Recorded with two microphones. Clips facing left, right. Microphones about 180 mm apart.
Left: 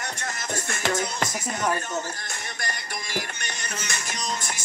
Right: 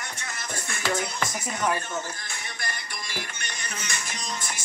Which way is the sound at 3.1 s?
45° left (ahead or behind).